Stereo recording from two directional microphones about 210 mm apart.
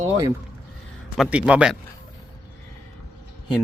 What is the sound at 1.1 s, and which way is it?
Speech, 5° right (ahead or behind).